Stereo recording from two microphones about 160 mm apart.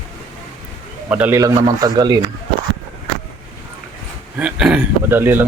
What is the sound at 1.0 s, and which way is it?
Speech, 10° right (ahead or behind).